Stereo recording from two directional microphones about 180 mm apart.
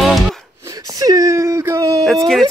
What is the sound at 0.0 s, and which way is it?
Music, centre (ahead or behind).